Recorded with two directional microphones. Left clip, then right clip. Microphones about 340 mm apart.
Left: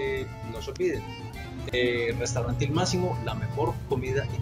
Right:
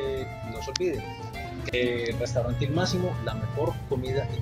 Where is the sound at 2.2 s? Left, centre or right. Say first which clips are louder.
Right 2 dB; left.